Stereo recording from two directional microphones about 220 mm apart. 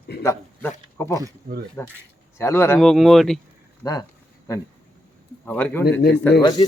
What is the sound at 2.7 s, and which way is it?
Speech, centre (ahead or behind).